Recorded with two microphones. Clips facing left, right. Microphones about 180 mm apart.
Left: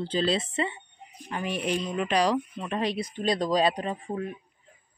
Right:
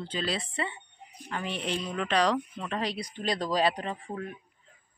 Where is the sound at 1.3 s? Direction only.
10° left (ahead or behind).